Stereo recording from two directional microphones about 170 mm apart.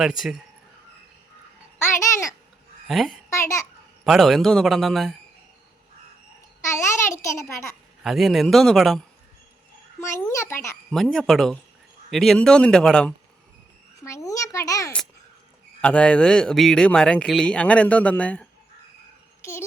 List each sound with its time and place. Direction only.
0.0 s a man's voice: 5° right (ahead or behind)
1.8 s babbling: 15° left (ahead or behind)
2.8 s a woman's voice: centre (ahead or behind)
3.2 s a child's voice: 15° left (ahead or behind)
4.0 s a man's voice: centre (ahead or behind)
6.7 s speech: 15° left (ahead or behind)
8.0 s a man's voice: centre (ahead or behind)
10.2 s speech: 15° left (ahead or behind)
10.9 s a man's voice: centre (ahead or behind)
14.0 s a child's voice: 20° left (ahead or behind)
15.8 s speech: 5° left (ahead or behind)